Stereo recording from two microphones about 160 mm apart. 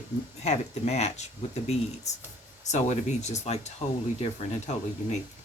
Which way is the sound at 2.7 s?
45° left (ahead or behind).